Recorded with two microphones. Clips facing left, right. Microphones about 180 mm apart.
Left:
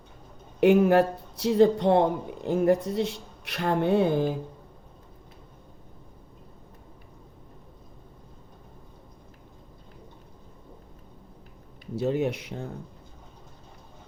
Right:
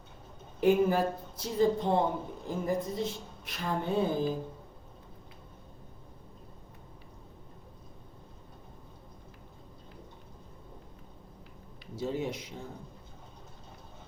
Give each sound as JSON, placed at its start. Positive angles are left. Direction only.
{"t": 0.6, "sound": "speech", "side_deg": 75}
{"t": 11.9, "sound": "speech", "side_deg": 65}